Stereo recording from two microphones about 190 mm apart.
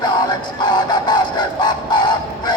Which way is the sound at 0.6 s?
20° left (ahead or behind).